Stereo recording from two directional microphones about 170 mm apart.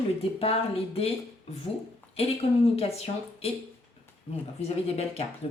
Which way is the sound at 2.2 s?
35° left (ahead or behind).